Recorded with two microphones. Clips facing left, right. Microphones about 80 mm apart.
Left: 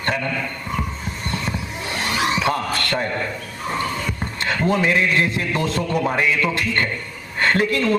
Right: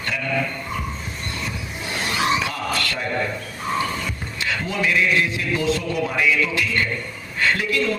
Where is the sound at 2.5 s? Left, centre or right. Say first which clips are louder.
Left 4 dB; left.